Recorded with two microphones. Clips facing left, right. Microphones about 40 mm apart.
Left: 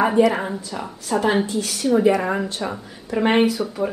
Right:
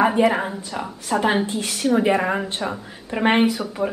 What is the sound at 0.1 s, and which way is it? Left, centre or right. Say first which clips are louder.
A woman's voice: left 1 dB; right.